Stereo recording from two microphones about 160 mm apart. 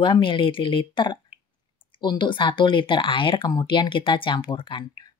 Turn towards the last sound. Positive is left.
turn(degrees=30)  # may be behind; listen again after turning